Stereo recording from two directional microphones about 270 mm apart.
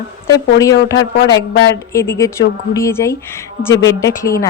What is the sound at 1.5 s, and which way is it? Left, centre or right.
Speech, left.